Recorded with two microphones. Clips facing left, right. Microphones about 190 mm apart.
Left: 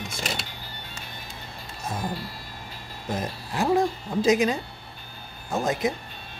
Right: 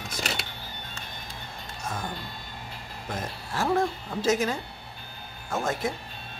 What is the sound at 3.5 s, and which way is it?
Speech, 15° left (ahead or behind).